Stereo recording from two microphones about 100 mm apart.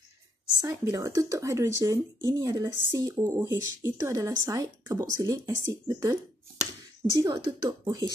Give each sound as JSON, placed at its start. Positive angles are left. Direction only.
{"t": 0.6, "sound": "speech", "side_deg": -35}
{"t": 7.2, "sound": "speech", "side_deg": -35}